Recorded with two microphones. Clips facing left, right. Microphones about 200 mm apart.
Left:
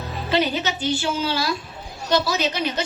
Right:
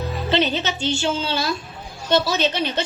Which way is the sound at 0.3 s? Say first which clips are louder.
Even; 25° right (ahead or behind).